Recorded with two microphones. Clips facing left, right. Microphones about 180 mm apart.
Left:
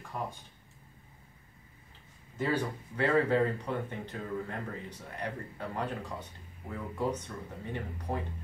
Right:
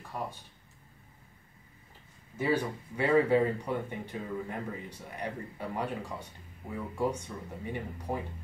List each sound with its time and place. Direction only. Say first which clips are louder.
0.1 s speech: even; 5° right (ahead or behind)
2.3 s speech: right 2 dB; 10° right (ahead or behind)